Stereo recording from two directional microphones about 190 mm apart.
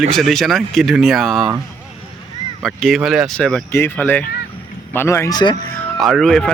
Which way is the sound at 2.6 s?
Centre (ahead or behind).